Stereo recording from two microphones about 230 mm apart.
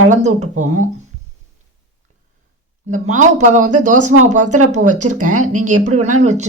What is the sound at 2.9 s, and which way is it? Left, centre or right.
Speech, right.